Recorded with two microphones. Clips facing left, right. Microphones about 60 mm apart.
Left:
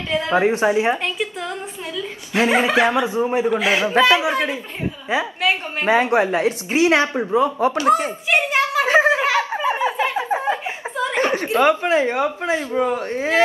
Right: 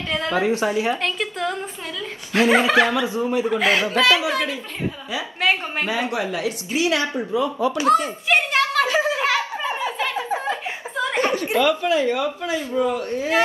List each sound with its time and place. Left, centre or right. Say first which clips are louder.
0.3 s speech: left 4 dB; left
1.0 s a woman's voice: right 1 dB; centre
2.3 s speech: right 1 dB; left
3.4 s a woman's voice: left 1 dB; centre
3.8 s speech: left 3 dB; left
8.3 s a sound: even; centre
8.8 s a sound: left 5 dB; left
11.1 s speech: left 2 dB; left